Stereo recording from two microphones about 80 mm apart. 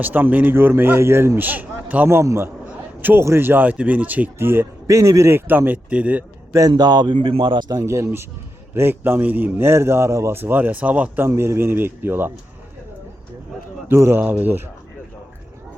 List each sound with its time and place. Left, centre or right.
0.0 s a man's voice: right
2.0 s a man's voice: right
4.9 s a man's voice: right; by 6.2 s centre
6.7 s speech: right
7.7 s a man's voice: right; by 11.3 s centre
11.3 s a man's voice: right
13.8 s a man's voice: right